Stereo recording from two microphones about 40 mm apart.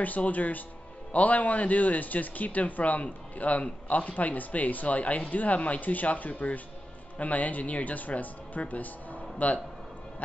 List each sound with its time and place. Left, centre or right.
0.0 s speech: left